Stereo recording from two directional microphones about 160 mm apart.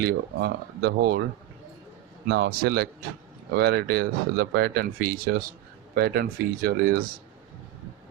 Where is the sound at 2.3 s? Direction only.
85° right; by 7.1 s 70° right (ahead or behind).